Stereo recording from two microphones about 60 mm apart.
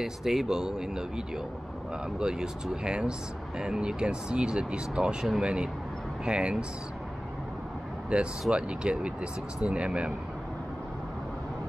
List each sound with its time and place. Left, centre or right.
0.0 s speech: centre
8.1 s speech: centre